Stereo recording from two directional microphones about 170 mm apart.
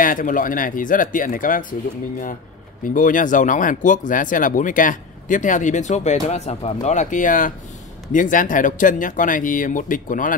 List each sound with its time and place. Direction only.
0.0 s speech: 55° left (ahead or behind)
2.8 s speech: 50° left (ahead or behind)